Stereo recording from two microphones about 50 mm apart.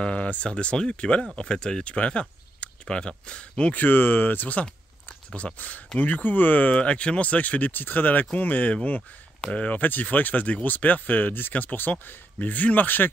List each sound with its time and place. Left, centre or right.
0.0 s speech: left
3.7 s speech: left
4.6 s a sound: left
5.9 s speech: left
6.8 s speech: left